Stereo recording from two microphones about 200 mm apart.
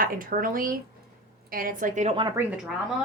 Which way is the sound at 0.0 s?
45° right (ahead or behind).